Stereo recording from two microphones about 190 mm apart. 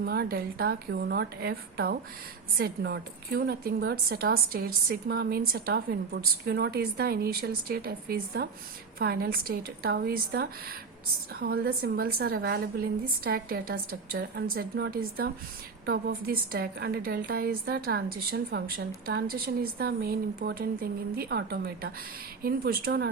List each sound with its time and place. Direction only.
0.0 s a woman's voice: 55° right (ahead or behind)